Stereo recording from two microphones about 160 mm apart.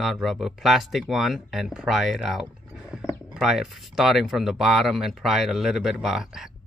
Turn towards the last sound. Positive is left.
turn(degrees=-5)  # may be behind; listen again after turning